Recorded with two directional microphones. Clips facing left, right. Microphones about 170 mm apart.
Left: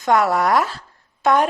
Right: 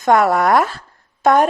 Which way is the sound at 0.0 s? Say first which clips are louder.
Right 3 dB; 50° right (ahead or behind).